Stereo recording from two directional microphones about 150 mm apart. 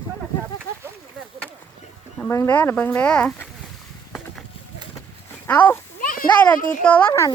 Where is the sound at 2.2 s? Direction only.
15° left (ahead or behind).